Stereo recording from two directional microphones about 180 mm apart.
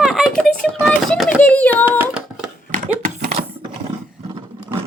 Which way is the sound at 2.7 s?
45° right (ahead or behind).